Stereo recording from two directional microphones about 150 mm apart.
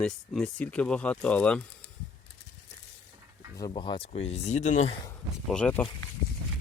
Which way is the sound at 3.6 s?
30° left (ahead or behind).